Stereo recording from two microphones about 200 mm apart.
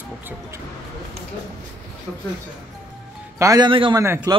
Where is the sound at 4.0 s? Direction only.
15° right (ahead or behind).